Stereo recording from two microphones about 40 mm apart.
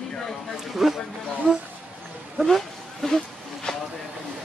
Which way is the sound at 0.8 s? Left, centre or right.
Centre.